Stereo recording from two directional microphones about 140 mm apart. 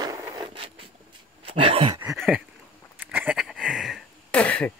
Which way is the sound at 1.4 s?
40° right (ahead or behind).